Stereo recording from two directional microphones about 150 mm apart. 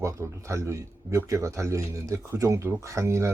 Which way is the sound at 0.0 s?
20° right (ahead or behind).